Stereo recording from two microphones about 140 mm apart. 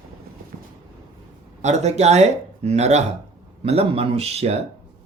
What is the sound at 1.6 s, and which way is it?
Speech, 55° right (ahead or behind).